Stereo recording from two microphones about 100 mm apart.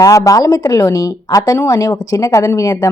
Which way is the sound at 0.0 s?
35° left (ahead or behind).